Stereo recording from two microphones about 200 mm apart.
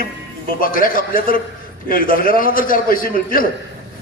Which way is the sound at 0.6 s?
45° left (ahead or behind).